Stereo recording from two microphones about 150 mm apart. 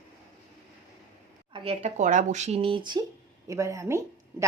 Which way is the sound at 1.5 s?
40° right (ahead or behind).